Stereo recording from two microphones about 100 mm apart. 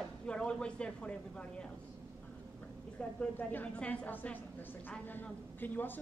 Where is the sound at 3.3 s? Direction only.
15° left (ahead or behind).